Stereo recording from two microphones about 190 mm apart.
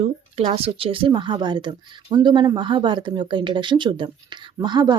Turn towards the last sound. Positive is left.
turn(degrees=-20)  # may be behind; listen again after turning